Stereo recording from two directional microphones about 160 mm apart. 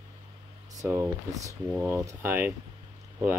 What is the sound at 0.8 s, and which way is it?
Speech, 20° right (ahead or behind).